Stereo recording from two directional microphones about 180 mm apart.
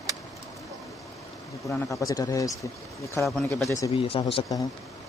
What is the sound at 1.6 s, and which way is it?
Speech, 15° left (ahead or behind).